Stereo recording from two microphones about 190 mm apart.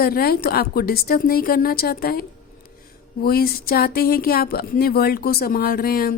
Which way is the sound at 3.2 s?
50° left (ahead or behind).